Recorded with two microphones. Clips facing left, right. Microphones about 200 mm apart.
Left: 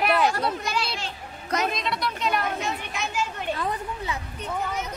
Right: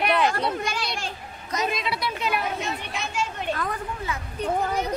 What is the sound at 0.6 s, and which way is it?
Speech, 50° right (ahead or behind).